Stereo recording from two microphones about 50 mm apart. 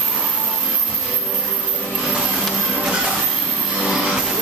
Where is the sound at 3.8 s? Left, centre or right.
Centre.